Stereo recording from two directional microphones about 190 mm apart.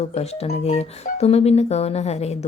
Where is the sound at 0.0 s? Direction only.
35° left (ahead or behind).